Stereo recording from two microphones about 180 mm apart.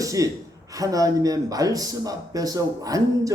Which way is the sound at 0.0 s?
20° right (ahead or behind).